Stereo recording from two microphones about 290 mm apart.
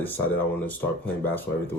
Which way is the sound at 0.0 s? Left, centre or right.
Centre.